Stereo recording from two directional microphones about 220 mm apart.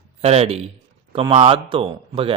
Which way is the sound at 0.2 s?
30° right (ahead or behind).